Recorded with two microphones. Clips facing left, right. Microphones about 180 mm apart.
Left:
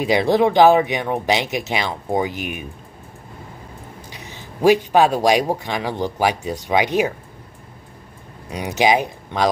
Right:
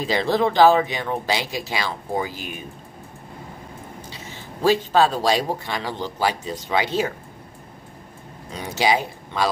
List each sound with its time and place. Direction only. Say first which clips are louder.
0.0 s a man's voice: left 4 dB; 15° left (ahead or behind)
4.1 s a man's voice: even; 15° left (ahead or behind)
8.5 s a man's voice: left 4 dB; 15° left (ahead or behind)